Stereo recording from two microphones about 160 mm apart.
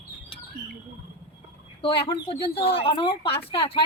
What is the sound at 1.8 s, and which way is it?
A woman's voice, 30° left (ahead or behind).